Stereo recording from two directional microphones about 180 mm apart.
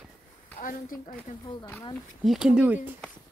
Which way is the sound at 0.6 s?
50° left (ahead or behind).